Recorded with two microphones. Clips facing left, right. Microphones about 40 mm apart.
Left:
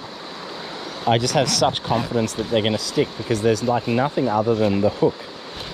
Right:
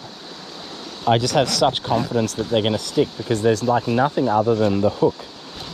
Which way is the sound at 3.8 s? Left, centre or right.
Centre.